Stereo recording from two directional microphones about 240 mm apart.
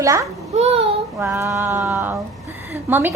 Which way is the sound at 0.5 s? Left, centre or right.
Right.